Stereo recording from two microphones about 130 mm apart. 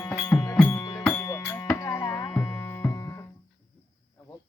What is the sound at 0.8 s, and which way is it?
Music, 30° left (ahead or behind).